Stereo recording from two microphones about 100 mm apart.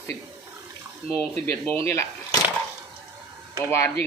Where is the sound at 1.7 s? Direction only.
25° left (ahead or behind).